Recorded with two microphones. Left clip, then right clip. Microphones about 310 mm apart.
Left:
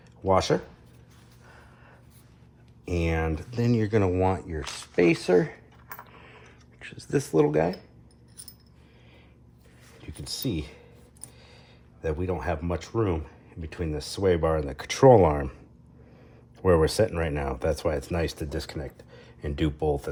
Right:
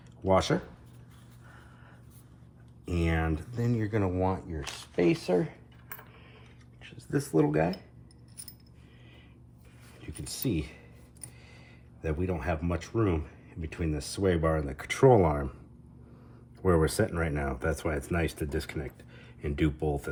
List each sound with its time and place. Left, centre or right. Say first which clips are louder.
0.3 s speech: left 3 dB; centre
2.8 s speech: left 3 dB; left
6.1 s a sound: left 5 dB; left
10.2 s speech: left 2 dB; centre
12.0 s speech: left 3 dB; centre
16.6 s speech: left 5 dB; left